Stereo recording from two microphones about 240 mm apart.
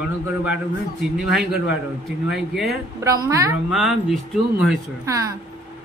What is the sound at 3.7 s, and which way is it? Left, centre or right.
Speech, centre.